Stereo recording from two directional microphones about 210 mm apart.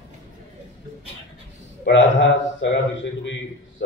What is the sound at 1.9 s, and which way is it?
A man's voice, 60° left (ahead or behind).